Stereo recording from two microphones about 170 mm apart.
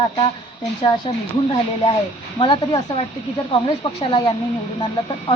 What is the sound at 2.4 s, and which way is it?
Speech, 30° left (ahead or behind).